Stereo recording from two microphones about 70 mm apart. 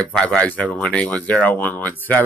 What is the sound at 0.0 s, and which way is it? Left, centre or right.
Speech, centre.